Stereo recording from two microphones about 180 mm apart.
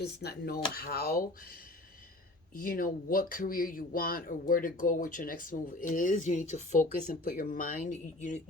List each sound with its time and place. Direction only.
0.0 s speech: 60° left (ahead or behind)
2.6 s speech: 50° left (ahead or behind)